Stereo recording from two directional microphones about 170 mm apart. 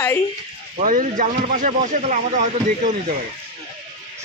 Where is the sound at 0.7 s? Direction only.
50° right (ahead or behind).